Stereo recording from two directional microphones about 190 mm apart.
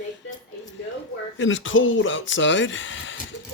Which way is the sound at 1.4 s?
90° left.